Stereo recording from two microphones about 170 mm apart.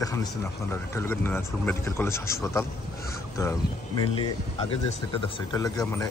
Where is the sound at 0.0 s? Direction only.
20° left (ahead or behind).